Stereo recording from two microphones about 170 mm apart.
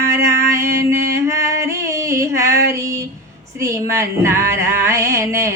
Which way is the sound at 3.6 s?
15° right (ahead or behind).